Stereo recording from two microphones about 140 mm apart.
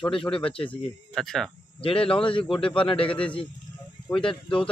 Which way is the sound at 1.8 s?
40° left (ahead or behind).